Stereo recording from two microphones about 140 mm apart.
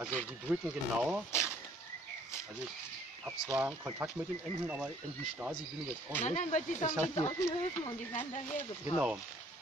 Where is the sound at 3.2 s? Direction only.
5° right (ahead or behind).